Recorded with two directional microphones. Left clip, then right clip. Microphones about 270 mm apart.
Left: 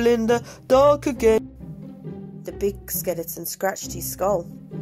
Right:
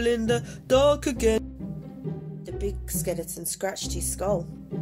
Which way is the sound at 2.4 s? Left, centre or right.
Left.